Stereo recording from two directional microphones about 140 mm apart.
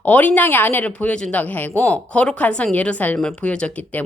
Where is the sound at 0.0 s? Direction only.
10° left (ahead or behind).